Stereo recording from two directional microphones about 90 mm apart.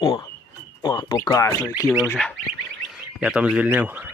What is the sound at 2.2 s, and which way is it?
Speech, 10° left (ahead or behind).